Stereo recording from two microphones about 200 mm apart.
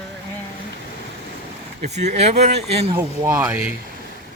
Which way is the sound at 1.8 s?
35° right (ahead or behind).